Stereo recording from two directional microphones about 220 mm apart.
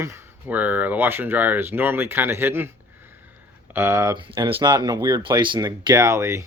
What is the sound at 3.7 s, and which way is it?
Speech, 10° right (ahead or behind).